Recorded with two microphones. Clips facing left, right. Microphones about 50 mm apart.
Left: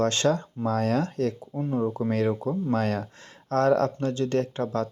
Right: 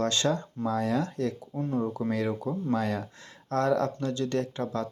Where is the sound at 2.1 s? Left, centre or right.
Left.